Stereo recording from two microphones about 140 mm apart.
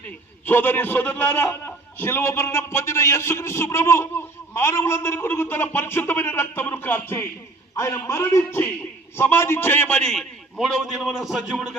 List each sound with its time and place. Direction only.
0.4 s a man's voice: 15° left (ahead or behind)
10.1 s a man's voice: centre (ahead or behind)